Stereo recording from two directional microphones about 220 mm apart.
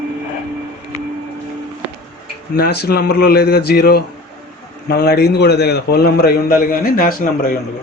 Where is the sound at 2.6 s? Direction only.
45° left (ahead or behind).